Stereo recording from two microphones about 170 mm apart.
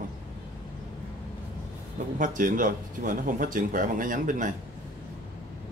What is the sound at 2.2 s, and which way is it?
Speech, 50° right (ahead or behind).